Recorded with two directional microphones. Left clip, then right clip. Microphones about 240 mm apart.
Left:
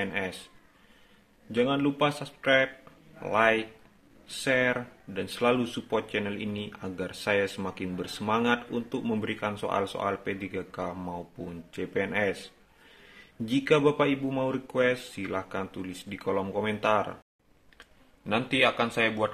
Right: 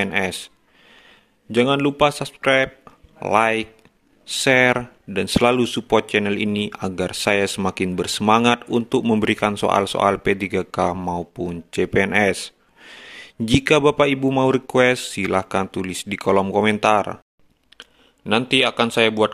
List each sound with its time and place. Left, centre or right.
0.0 s speech: right
1.5 s speech: right